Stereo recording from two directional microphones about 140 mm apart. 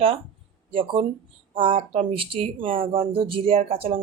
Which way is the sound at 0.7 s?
40° right (ahead or behind).